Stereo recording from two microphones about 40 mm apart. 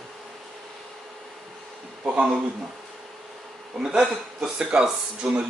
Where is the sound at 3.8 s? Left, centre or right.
Centre.